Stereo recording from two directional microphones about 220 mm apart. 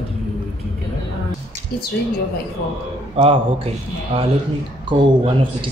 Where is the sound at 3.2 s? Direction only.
25° right (ahead or behind).